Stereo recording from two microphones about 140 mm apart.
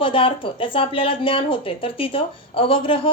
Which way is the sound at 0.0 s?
40° left (ahead or behind).